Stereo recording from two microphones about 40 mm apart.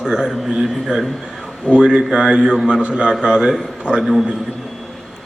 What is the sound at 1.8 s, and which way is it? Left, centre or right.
A man's voice, centre.